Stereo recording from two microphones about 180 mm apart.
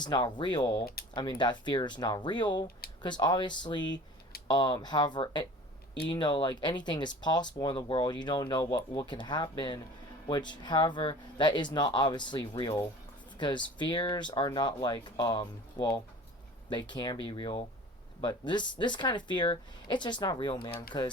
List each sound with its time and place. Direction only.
0.0 s speech: 25° left (ahead or behind)